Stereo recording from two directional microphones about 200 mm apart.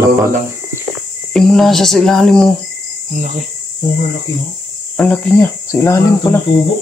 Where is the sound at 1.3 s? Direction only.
Centre (ahead or behind).